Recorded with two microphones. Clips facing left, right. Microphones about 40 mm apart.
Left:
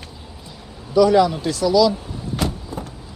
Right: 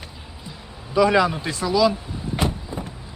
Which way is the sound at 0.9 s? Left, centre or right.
Right.